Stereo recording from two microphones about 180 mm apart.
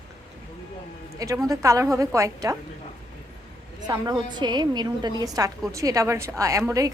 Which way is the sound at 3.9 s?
25° right (ahead or behind).